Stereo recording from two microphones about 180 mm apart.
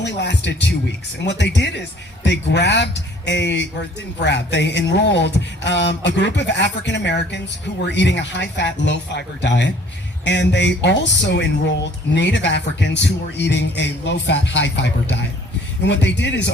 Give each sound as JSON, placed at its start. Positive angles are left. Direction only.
{"t": 0.0, "sound": "speech", "side_deg": 75}
{"t": 15.9, "sound": "speech", "side_deg": 75}